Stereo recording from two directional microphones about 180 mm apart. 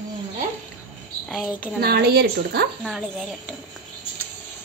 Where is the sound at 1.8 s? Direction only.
60° right (ahead or behind).